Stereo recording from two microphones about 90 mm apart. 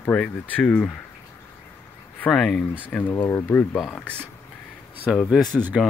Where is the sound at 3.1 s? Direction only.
30° left (ahead or behind).